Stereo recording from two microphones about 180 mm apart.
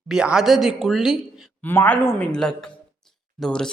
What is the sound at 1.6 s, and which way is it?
A woman's voice, 10° left (ahead or behind).